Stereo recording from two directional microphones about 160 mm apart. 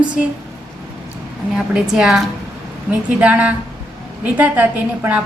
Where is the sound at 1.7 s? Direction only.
5° right (ahead or behind).